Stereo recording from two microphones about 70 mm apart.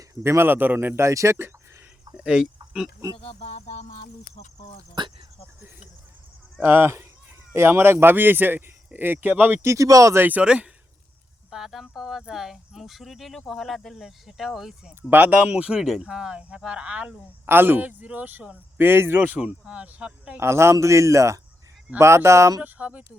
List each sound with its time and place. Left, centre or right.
0.1 s speech: right
2.1 s speech: centre
5.0 s speech: right
6.7 s speech: right
9.6 s a man's voice: right
10.2 s speech: right
10.4 s speech: centre
15.1 s speech: right
15.8 s speech: centre
17.4 s speech: right
19.2 s speech: right
20.4 s a man's voice: right
22.6 s speech: right